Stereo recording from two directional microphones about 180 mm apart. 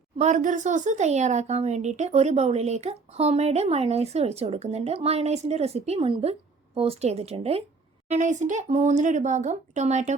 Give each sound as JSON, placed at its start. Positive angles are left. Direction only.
{"t": 0.2, "sound": "speech", "side_deg": -45}